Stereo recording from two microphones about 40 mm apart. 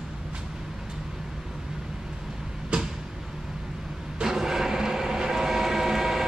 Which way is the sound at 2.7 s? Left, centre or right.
Right.